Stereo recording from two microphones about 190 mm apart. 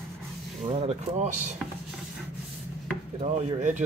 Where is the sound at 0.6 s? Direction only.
35° right (ahead or behind).